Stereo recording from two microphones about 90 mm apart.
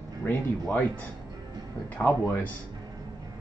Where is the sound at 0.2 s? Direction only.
25° left (ahead or behind).